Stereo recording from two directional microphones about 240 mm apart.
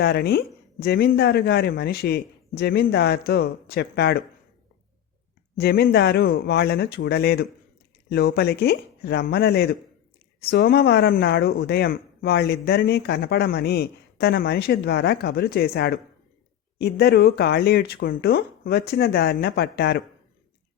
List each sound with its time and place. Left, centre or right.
0.0 s speech: left
5.5 s speech: left